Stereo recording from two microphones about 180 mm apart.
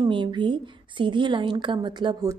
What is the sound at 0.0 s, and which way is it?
A woman's voice, 25° right (ahead or behind).